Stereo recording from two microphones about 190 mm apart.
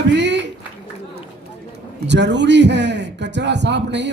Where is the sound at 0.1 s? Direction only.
65° right (ahead or behind).